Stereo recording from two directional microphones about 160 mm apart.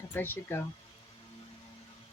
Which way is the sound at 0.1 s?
15° left (ahead or behind).